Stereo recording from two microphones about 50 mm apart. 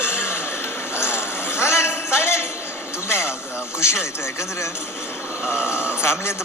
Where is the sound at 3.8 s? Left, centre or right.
Left.